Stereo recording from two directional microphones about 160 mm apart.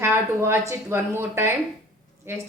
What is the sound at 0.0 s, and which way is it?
A woman's voice, 15° right (ahead or behind).